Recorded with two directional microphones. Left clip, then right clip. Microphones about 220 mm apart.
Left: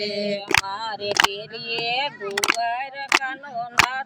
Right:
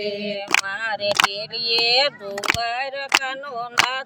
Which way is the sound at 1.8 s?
50° right (ahead or behind).